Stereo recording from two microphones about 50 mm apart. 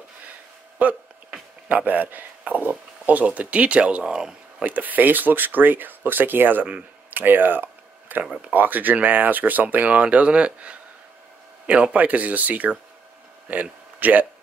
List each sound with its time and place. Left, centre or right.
0.8 s speech: right
4.6 s speech: right
7.1 s a sound: right
8.5 s speech: right